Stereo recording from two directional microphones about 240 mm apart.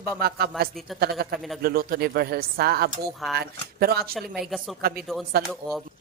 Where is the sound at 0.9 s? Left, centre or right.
Right.